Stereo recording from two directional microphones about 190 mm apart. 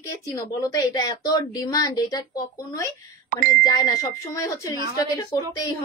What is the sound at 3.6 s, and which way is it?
Speech, 20° left (ahead or behind).